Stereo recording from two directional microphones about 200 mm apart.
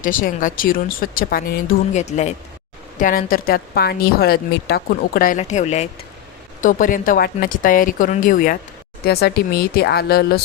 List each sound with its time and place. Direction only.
0.0 s a woman's voice: 40° left (ahead or behind)